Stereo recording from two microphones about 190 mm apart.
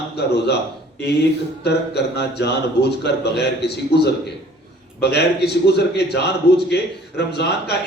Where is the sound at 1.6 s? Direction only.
60° left (ahead or behind).